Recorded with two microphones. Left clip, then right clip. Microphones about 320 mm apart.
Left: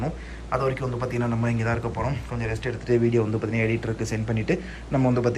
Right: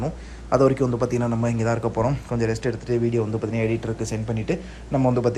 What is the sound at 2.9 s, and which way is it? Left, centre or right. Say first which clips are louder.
A man's voice: left 3 dB; centre.